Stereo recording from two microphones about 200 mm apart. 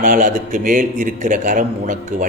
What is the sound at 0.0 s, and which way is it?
A man's voice, 40° right (ahead or behind).